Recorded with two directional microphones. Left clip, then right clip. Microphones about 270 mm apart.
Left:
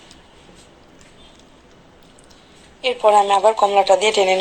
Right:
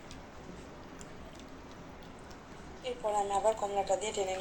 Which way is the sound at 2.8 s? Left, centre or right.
Left.